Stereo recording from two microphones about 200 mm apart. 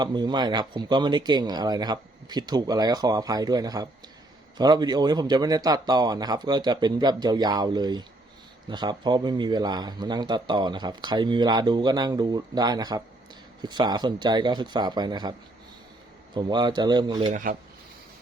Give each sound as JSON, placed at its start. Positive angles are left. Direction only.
{"t": 0.0, "sound": "speech", "side_deg": -20}
{"t": 17.3, "sound": "speech", "side_deg": -45}